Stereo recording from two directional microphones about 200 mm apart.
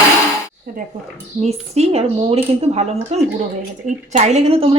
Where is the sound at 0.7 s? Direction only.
45° right (ahead or behind).